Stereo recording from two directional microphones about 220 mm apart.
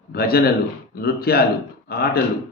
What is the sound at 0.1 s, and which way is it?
A man's voice, 45° left (ahead or behind).